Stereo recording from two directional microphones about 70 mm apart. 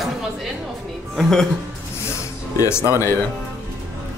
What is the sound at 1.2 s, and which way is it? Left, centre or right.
Speech, centre.